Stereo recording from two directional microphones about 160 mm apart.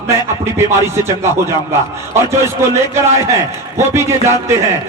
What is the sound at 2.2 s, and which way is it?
Speech, 15° right (ahead or behind).